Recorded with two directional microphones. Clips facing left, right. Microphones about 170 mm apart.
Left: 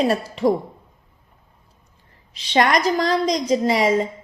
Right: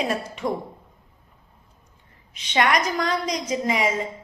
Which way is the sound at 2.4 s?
35° left (ahead or behind).